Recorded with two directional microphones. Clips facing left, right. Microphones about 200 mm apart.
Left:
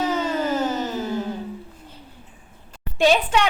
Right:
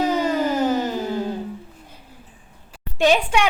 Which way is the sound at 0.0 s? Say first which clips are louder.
Right 3 dB; 15° right (ahead or behind).